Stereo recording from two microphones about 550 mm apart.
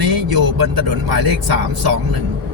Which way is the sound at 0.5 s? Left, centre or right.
Right.